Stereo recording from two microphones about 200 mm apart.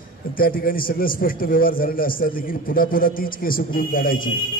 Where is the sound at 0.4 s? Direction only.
45° left (ahead or behind).